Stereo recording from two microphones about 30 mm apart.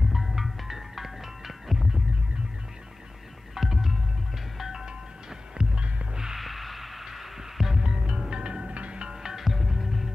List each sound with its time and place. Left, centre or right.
0.1 s music: centre
3.5 s music: centre
5.6 s music: right
6.3 s hum: centre
7.9 s music: right
9.1 s music: centre
9.4 s music: centre